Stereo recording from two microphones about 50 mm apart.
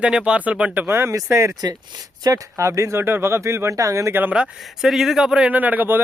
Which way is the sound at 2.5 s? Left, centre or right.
Right.